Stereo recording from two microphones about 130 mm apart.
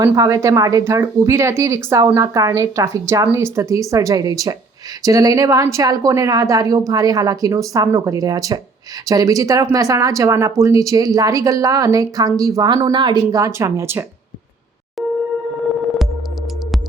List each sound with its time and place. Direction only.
0.0 s speech: 25° right (ahead or behind)
13.3 s speech: 25° right (ahead or behind)